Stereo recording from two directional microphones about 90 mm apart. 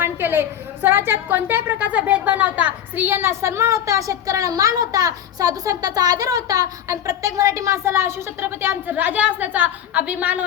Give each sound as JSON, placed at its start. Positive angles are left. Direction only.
{"t": 0.0, "sound": "a woman's voice", "side_deg": -25}